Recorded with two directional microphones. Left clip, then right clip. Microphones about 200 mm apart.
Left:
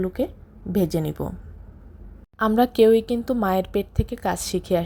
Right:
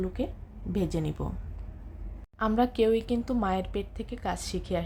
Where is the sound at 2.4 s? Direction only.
25° left (ahead or behind).